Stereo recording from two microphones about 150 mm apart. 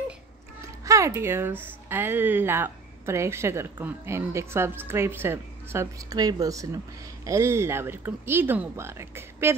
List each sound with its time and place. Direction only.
0.8 s speech: 20° right (ahead or behind)